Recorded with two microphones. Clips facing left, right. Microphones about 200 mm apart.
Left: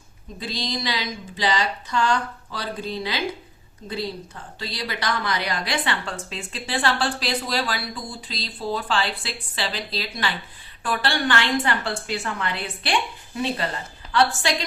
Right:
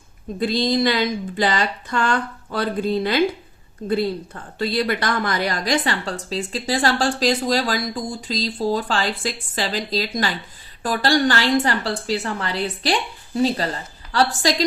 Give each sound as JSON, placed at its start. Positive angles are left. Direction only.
{"t": 0.3, "sound": "a woman's voice", "side_deg": -55}